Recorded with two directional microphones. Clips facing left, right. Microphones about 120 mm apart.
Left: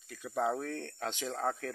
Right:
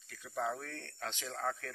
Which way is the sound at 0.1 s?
20° left (ahead or behind).